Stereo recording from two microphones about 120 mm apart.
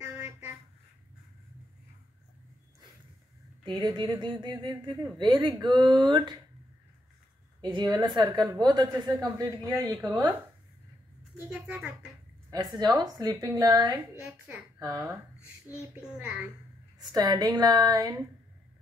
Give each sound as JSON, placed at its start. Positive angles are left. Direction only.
{"t": 0.0, "sound": "a sound", "side_deg": -20}
{"t": 3.6, "sound": "a woman's voice", "side_deg": -40}
{"t": 7.6, "sound": "a woman's voice", "side_deg": -35}
{"t": 11.3, "sound": "a woman's voice", "side_deg": -15}
{"t": 12.4, "sound": "a woman's voice", "side_deg": -35}
{"t": 15.9, "sound": "a woman's voice", "side_deg": -10}
{"t": 17.0, "sound": "a woman's voice", "side_deg": -35}